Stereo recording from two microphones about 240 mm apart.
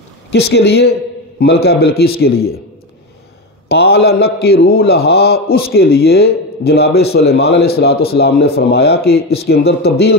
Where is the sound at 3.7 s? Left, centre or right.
Left.